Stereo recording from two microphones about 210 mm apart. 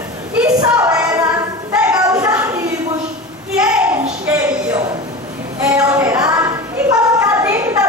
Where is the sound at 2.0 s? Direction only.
15° right (ahead or behind).